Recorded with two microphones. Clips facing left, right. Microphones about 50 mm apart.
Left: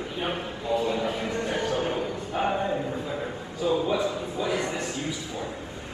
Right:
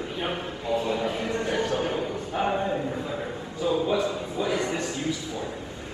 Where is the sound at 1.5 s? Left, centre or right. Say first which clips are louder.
Right 1 dB; left.